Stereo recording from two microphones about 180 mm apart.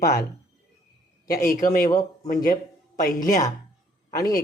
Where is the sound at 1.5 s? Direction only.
50° left (ahead or behind).